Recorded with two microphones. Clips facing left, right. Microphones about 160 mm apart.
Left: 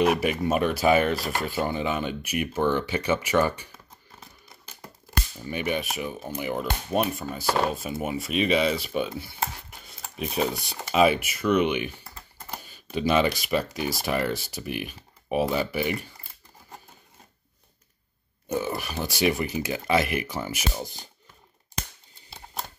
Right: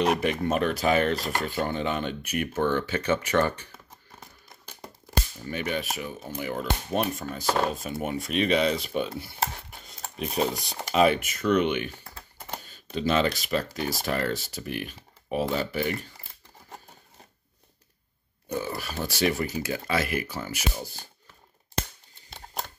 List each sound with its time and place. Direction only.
0.0 s speech: 5° left (ahead or behind)
5.4 s speech: 15° left (ahead or behind)
18.5 s speech: 20° left (ahead or behind)